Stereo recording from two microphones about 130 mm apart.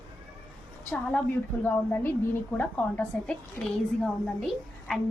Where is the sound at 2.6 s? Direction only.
10° left (ahead or behind).